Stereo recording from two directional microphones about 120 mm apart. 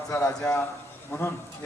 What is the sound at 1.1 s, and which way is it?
Speech, 20° left (ahead or behind).